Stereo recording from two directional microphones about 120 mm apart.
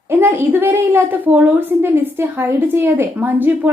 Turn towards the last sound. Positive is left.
turn(degrees=-15)  # may be behind; listen again after turning